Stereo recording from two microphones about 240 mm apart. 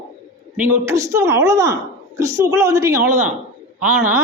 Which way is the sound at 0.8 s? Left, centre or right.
Centre.